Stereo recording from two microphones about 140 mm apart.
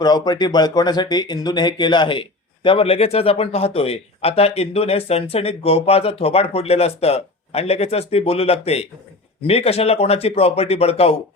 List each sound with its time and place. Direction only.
0.0 s speech: 30° left (ahead or behind); by 11.2 s 45° left (ahead or behind)